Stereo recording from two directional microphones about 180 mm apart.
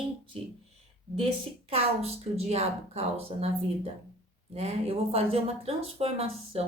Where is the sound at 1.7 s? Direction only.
35° right (ahead or behind).